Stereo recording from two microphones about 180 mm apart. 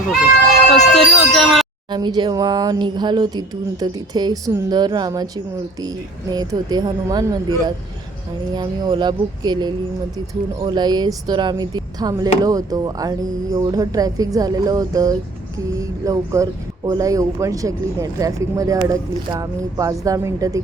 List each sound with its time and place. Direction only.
0.7 s music: centre (ahead or behind)
1.9 s speech: 25° right (ahead or behind)
6.3 s speech: 20° right (ahead or behind)